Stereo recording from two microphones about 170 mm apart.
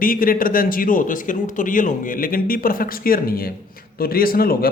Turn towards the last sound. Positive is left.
turn(degrees=60)  # may be behind; listen again after turning